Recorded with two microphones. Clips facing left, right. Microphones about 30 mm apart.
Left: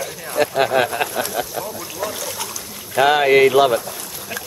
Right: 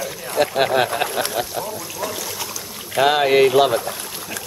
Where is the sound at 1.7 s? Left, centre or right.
Centre.